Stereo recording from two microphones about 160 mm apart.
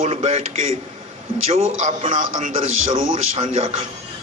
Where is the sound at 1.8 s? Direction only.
50° right (ahead or behind).